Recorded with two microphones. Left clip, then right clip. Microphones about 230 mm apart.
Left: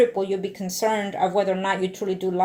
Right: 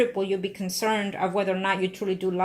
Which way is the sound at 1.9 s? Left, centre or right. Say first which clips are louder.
Left 2 dB; right.